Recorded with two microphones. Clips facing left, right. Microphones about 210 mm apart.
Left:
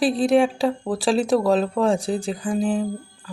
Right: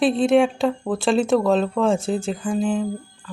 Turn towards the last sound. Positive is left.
turn(degrees=0)  # may be behind; listen again after turning